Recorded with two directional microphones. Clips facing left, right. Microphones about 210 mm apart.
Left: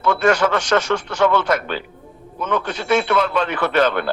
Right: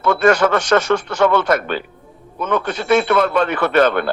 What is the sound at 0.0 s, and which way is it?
A man's voice, 50° right (ahead or behind).